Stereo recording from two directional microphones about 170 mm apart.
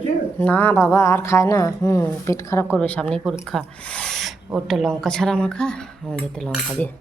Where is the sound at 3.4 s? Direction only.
5° left (ahead or behind).